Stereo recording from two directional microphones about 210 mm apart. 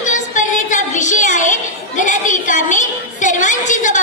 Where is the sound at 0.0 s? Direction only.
35° left (ahead or behind).